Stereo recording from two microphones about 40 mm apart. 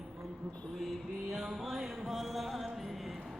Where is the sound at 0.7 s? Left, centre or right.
Centre.